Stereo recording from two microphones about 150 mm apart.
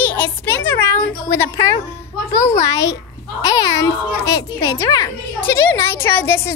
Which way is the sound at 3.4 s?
25° left (ahead or behind).